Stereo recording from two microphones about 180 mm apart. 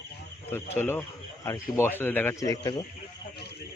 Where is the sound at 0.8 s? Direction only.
10° left (ahead or behind).